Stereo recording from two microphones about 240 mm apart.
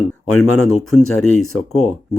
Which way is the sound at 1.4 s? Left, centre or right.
Left.